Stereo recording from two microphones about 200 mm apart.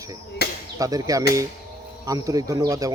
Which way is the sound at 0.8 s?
15° right (ahead or behind).